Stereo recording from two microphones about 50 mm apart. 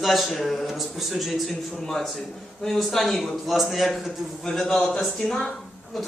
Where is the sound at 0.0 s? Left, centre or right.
Centre.